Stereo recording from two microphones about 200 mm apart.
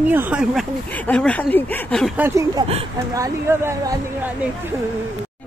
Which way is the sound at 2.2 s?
15° right (ahead or behind).